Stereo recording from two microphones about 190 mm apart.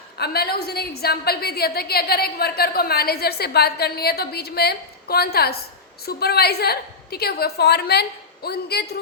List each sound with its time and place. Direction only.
0.2 s a woman's voice: 55° left (ahead or behind)